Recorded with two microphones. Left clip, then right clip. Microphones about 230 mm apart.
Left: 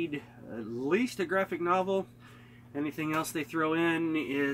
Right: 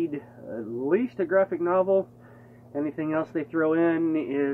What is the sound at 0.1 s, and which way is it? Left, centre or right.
Speech, left.